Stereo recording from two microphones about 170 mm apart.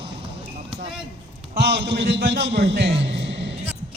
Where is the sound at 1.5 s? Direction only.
75° right (ahead or behind); by 3.5 s 90° right.